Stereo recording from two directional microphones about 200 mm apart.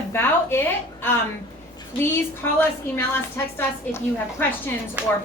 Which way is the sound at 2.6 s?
10° left (ahead or behind).